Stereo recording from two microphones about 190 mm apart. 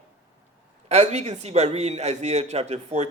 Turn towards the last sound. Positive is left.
turn(degrees=-35)  # may be behind; listen again after turning